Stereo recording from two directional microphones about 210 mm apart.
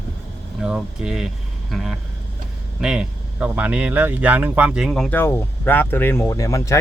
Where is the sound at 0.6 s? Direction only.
5° right (ahead or behind).